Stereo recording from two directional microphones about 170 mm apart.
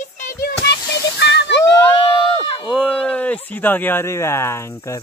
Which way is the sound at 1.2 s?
90° left.